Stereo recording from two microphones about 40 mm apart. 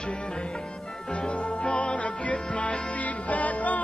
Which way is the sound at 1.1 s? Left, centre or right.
Left.